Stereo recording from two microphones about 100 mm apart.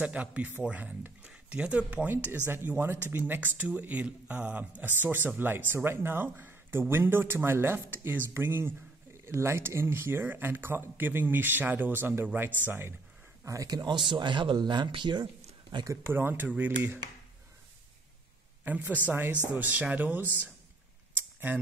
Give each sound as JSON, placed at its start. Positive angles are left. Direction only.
{"t": 0.0, "sound": "speech", "side_deg": -10}
{"t": 13.5, "sound": "speech", "side_deg": -35}
{"t": 15.9, "sound": "speech", "side_deg": -25}
{"t": 18.6, "sound": "a woman's voice", "side_deg": -15}
{"t": 21.2, "sound": "a sound", "side_deg": -20}